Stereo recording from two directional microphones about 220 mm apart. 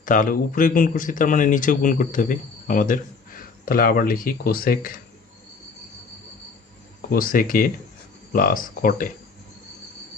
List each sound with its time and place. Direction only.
0.0 s speech: 35° left (ahead or behind)
7.1 s speech: 40° left (ahead or behind)